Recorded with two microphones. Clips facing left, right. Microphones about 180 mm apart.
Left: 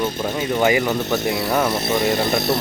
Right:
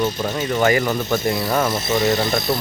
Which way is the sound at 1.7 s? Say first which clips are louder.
Even; 55° left (ahead or behind).